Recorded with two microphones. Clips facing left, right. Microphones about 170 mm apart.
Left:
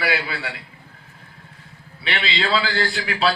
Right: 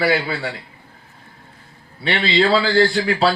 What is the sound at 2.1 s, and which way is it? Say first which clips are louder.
Speech: right 6 dB; 35° right (ahead or behind).